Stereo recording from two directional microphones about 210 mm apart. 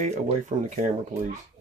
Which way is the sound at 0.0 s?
35° right (ahead or behind).